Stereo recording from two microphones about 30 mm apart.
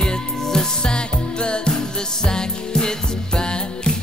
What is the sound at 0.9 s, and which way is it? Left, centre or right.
Music, left.